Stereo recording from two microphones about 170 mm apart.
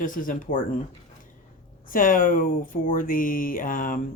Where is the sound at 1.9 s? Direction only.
55° left (ahead or behind).